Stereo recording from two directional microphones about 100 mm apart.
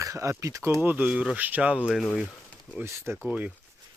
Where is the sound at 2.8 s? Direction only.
25° right (ahead or behind).